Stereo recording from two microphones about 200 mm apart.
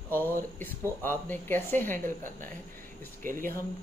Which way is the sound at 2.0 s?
40° right (ahead or behind).